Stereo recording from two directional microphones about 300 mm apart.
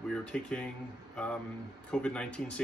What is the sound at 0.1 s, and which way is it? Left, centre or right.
Speech, centre.